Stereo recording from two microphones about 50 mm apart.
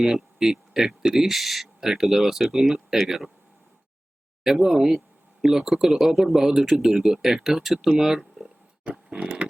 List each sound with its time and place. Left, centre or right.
0.0 s speech: centre
4.4 s speech: centre
8.8 s a sound: right